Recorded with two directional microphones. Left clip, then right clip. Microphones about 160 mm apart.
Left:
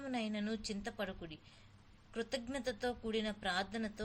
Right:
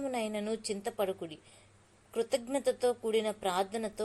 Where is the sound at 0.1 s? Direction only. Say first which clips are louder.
Right 6 dB; 15° right (ahead or behind).